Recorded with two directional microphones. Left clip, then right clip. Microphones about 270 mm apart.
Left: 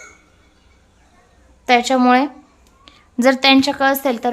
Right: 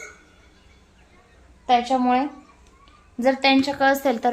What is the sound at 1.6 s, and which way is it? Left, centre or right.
A woman's voice, left.